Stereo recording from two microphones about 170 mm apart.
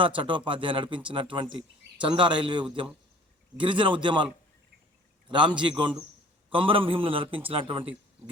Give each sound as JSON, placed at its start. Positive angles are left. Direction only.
{"t": 0.2, "sound": "speech", "side_deg": -30}
{"t": 5.3, "sound": "a man's voice", "side_deg": -30}